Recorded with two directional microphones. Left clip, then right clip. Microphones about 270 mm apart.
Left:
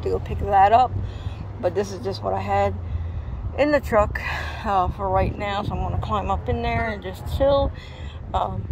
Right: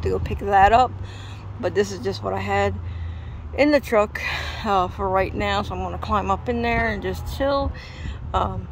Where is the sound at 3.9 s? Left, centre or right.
Right.